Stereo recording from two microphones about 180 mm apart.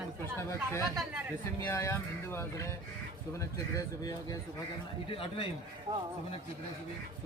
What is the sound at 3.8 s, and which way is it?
Speech, 20° left (ahead or behind).